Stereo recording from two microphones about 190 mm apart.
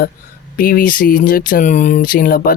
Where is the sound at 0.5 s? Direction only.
50° left (ahead or behind).